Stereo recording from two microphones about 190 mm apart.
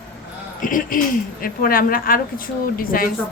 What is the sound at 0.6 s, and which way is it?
A woman's voice, 45° left (ahead or behind).